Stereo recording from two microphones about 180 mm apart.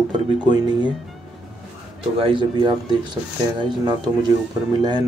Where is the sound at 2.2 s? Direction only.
30° right (ahead or behind).